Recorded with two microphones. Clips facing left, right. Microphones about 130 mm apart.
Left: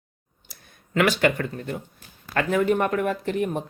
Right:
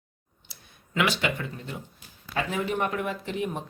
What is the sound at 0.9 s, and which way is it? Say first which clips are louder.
Speech: left 6 dB; 50° left (ahead or behind).